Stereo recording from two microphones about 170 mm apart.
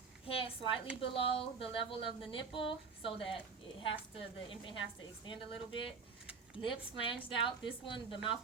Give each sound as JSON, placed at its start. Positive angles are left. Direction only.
{"t": 0.3, "sound": "a woman's voice", "side_deg": 35}